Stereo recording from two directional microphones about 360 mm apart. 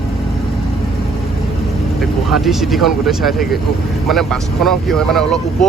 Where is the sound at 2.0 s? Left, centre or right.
Centre.